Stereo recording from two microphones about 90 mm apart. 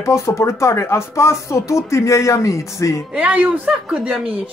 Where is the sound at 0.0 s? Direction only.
30° left (ahead or behind).